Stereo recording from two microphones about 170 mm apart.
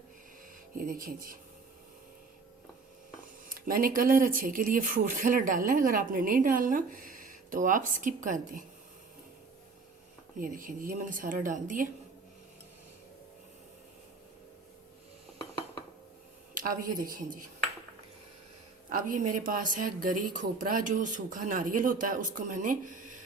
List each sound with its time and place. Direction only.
0.8 s speech: 55° right (ahead or behind)
3.5 s speech: 55° right (ahead or behind)
10.3 s speech: 55° right (ahead or behind)
16.6 s a woman's voice: 55° right (ahead or behind)
18.9 s speech: 55° right (ahead or behind)